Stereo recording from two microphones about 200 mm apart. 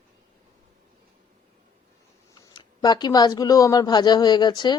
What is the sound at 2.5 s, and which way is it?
Speech, 20° left (ahead or behind).